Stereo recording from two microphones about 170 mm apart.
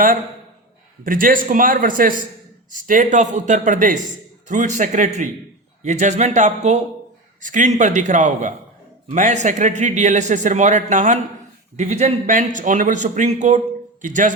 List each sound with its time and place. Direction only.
1.0 s a man's voice: 55° right (ahead or behind)